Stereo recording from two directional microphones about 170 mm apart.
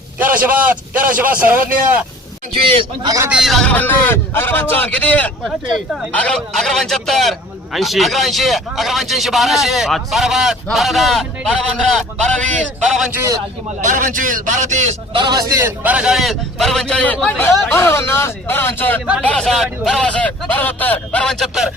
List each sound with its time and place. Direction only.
0.3 s a man's voice: 10° right (ahead or behind)
3.0 s speech: 20° right (ahead or behind)
3.2 s speech: 5° right (ahead or behind)
13.1 s speech: 20° right (ahead or behind)
13.8 s speech: 50° right (ahead or behind)
15.1 s speech: 25° right (ahead or behind); by 21.7 s centre (ahead or behind)